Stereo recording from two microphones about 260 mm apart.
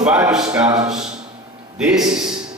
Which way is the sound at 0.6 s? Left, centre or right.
Centre.